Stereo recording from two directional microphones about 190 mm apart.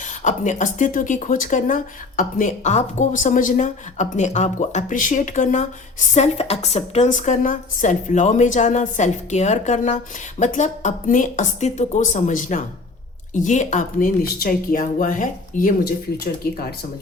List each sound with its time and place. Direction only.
0.0 s speech: 40° left (ahead or behind)